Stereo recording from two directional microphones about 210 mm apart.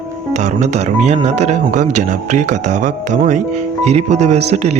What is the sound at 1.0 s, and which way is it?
Speech, 30° right (ahead or behind).